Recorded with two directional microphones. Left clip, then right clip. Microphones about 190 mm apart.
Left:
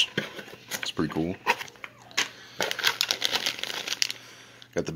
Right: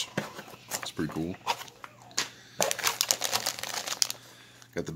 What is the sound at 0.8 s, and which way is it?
Speech, 10° left (ahead or behind).